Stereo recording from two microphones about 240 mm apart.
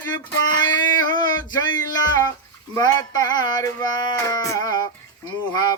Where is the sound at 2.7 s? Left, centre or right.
Centre.